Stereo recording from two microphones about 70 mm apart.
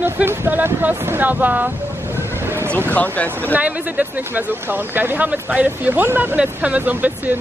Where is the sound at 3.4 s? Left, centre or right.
Right.